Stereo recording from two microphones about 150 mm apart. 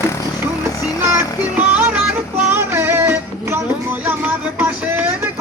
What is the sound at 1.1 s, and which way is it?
Music, 10° right (ahead or behind).